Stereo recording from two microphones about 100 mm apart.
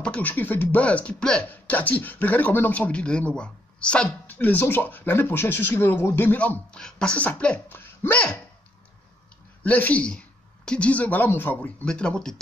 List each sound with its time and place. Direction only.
0.0 s speech: 15° left (ahead or behind)
9.6 s a woman's voice: 15° left (ahead or behind)